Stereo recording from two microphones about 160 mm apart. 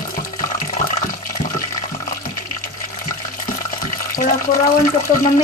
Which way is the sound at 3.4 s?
60° left (ahead or behind).